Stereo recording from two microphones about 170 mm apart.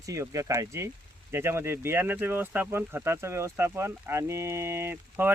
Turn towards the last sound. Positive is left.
turn(degrees=-10)  # may be behind; listen again after turning